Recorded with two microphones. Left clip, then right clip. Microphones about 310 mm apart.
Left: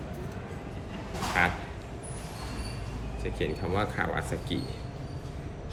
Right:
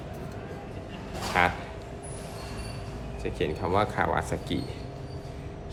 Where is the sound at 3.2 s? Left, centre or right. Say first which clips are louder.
Right 3 dB; centre.